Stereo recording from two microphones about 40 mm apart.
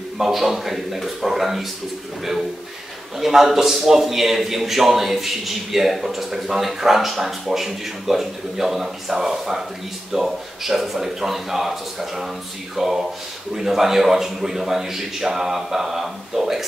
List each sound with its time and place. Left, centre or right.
0.2 s speech: centre
3.2 s a man's voice: centre